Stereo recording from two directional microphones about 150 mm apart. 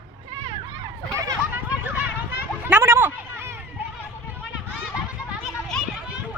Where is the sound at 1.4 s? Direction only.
10° right (ahead or behind).